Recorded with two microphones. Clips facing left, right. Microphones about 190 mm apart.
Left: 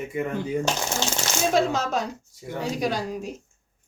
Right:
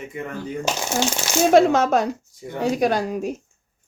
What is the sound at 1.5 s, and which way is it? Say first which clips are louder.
Speech: right 9 dB; 65° right (ahead or behind).